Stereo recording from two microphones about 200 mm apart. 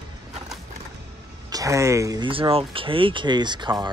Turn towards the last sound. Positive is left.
turn(degrees=-20)  # may be behind; listen again after turning